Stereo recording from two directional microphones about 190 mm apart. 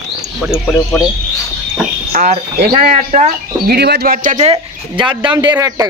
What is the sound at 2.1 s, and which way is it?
A man's voice, 40° right (ahead or behind).